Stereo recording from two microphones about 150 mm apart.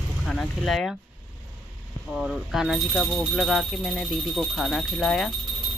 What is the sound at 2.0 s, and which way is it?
Speech, 5° right (ahead or behind).